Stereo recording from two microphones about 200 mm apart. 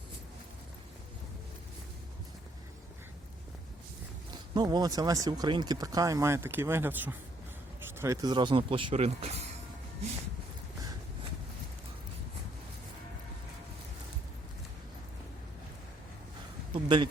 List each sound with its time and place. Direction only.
4.5 s speech: 20° right (ahead or behind)
16.7 s speech: 25° right (ahead or behind)